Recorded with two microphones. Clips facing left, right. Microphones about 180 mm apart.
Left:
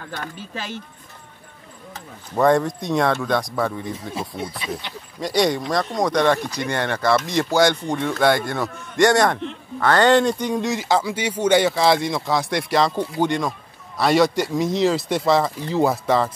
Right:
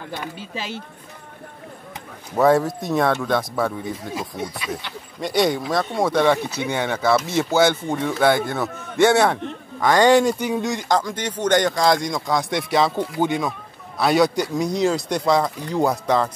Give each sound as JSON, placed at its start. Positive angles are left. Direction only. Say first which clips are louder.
{"t": 2.3, "sound": "speech", "louder": "right 1 dB", "side_deg": -5}
{"t": 4.1, "sound": "speech", "louder": "even", "side_deg": 25}
{"t": 5.2, "sound": "speech", "louder": "even", "side_deg": 0}